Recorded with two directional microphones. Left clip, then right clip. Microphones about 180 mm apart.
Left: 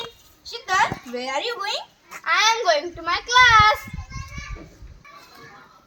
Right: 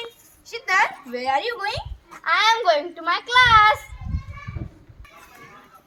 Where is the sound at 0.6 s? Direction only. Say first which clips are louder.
Right 1 dB; 15° right (ahead or behind).